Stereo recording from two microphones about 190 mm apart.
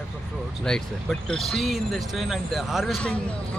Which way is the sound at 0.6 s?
5° left (ahead or behind).